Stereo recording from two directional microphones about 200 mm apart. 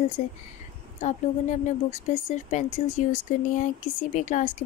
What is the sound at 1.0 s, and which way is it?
Speech, 35° left (ahead or behind).